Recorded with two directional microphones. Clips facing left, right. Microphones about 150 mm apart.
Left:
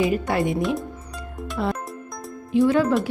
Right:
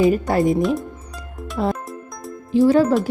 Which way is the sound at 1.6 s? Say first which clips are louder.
Right 4 dB; 35° right (ahead or behind).